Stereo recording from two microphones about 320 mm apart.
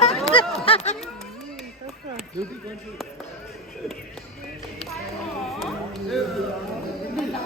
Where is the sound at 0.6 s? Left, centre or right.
Centre.